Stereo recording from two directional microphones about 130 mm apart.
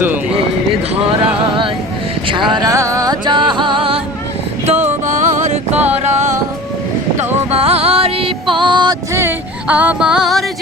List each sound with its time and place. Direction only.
2.2 s music: 35° right (ahead or behind)
5.0 s music: 70° right (ahead or behind)
7.5 s music: 50° right (ahead or behind)
9.6 s music: 10° right (ahead or behind)